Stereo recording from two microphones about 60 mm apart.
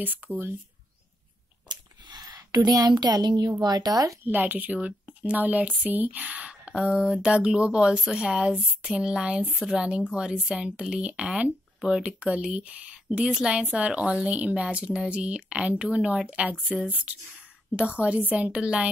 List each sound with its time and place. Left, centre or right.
0.0 s speech: right
2.1 s a sound: right
3.6 s speech: right
4.2 s a woman's voice: right
4.7 s speech: centre